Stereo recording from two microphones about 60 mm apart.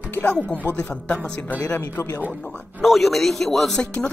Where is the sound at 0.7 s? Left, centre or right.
Centre.